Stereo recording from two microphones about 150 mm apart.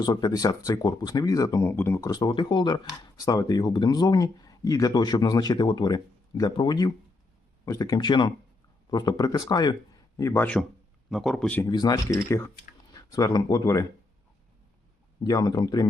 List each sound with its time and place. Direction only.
0.0 s speech: 25° left (ahead or behind)
10.2 s speech: 15° left (ahead or behind)
11.6 s speech: 25° left (ahead or behind)
15.2 s speech: 25° left (ahead or behind)